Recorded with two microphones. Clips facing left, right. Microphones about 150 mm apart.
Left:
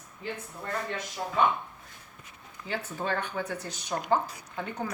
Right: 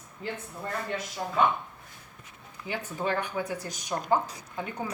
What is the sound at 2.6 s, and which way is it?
Speech, 15° right (ahead or behind).